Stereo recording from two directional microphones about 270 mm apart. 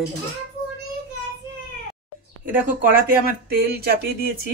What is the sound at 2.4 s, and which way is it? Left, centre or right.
Speech, right.